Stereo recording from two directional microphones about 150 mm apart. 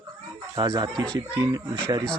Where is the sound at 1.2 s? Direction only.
25° right (ahead or behind).